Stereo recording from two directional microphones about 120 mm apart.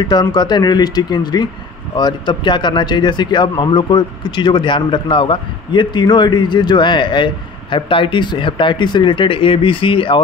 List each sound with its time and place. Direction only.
0.0 s speech: 35° left (ahead or behind)